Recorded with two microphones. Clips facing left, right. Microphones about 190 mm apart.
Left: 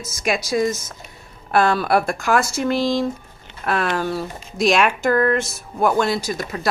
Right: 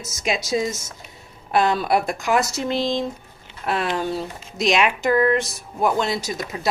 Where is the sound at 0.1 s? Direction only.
20° right (ahead or behind).